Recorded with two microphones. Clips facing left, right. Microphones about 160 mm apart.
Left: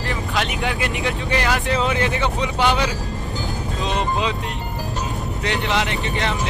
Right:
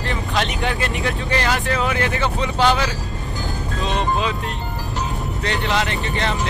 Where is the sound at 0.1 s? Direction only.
10° left (ahead or behind).